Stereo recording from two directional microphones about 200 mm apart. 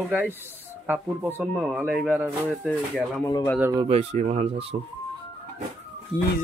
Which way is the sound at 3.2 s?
20° left (ahead or behind).